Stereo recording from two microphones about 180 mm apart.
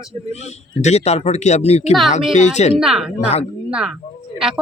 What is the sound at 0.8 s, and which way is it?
Speech, 35° left (ahead or behind).